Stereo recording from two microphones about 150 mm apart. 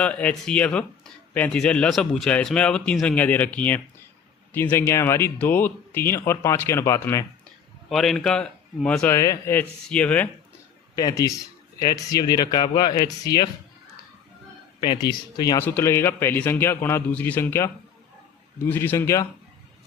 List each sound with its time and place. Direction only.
0.0 s speech: 10° left (ahead or behind)
7.9 s speech: centre (ahead or behind)
9.1 s speech: 20° left (ahead or behind)
10.9 s speech: 25° left (ahead or behind)
14.8 s speech: 30° left (ahead or behind)
15.6 s speech: 15° left (ahead or behind)